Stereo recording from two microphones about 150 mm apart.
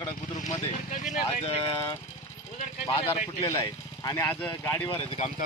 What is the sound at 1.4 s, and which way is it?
Speech, 45° left (ahead or behind).